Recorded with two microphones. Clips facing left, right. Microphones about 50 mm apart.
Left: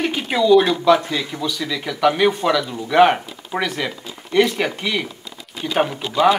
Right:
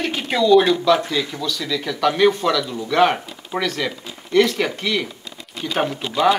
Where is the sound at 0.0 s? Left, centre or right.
Centre.